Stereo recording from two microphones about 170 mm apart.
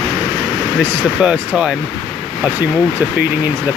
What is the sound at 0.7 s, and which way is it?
Speech, 5° right (ahead or behind).